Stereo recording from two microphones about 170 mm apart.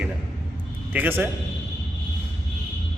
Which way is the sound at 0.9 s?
10° right (ahead or behind).